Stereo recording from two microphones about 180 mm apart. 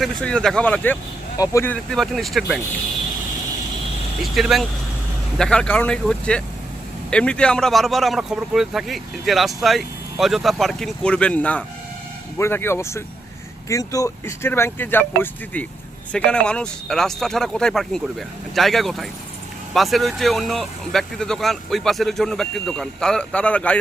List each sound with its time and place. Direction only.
0.0 s speech: 5° left (ahead or behind)
4.2 s speech: centre (ahead or behind)